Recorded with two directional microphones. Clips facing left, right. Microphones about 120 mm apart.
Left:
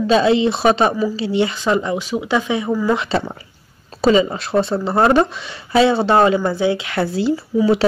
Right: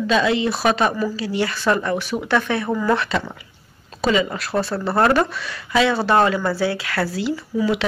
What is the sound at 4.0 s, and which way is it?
Speech, 25° left (ahead or behind).